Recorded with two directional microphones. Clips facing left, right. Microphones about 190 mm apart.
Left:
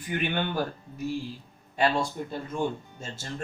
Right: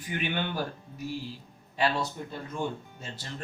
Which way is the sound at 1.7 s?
45° left (ahead or behind).